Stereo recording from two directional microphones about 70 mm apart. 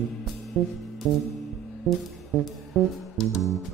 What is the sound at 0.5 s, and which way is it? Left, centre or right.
Music, centre.